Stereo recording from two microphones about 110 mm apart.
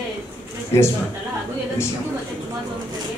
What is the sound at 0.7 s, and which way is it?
Speech, 25° left (ahead or behind).